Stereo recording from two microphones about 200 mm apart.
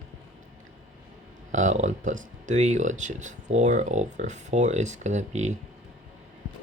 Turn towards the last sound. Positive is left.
turn(degrees=-35)  # may be behind; listen again after turning